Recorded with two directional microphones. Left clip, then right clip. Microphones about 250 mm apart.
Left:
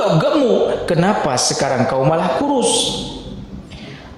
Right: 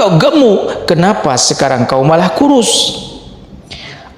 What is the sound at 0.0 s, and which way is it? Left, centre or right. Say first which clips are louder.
A man's voice: right 7 dB; right.